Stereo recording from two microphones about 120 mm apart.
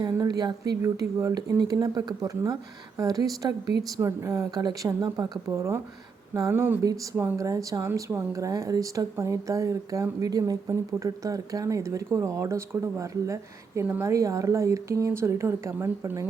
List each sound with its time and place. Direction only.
0.0 s speech: 35° right (ahead or behind)
6.8 s speech: 30° right (ahead or behind)
13.8 s speech: 15° right (ahead or behind)
14.1 s speech: 25° right (ahead or behind)